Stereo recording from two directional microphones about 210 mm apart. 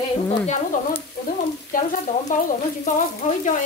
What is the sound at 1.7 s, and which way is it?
Frying, 40° left (ahead or behind).